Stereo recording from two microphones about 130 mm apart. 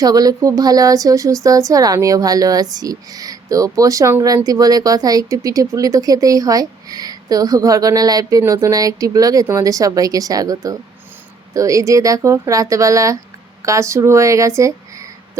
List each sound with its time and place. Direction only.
0.0 s speech: 30° right (ahead or behind)